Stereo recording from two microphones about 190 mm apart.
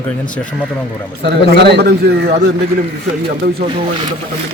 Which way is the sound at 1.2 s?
60° right (ahead or behind).